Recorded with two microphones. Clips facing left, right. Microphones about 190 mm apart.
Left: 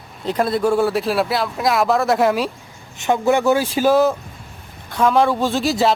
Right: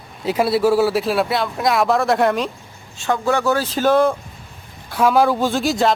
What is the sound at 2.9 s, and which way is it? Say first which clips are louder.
Speech: left 3 dB; 20° left (ahead or behind).